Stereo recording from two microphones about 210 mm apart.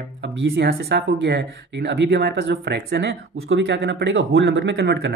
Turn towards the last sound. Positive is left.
turn(degrees=-50)  # may be behind; listen again after turning